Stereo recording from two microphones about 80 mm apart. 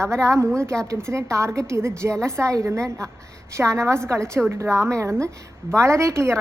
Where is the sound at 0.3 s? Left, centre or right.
Right.